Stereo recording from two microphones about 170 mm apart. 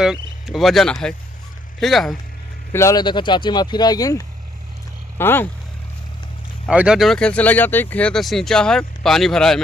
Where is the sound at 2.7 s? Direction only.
20° left (ahead or behind).